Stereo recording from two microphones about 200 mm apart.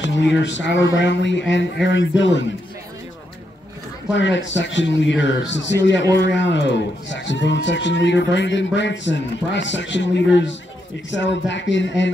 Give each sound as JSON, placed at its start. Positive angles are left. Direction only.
{"t": 0.0, "sound": "a man's voice", "side_deg": 65}
{"t": 4.1, "sound": "a man's voice", "side_deg": 65}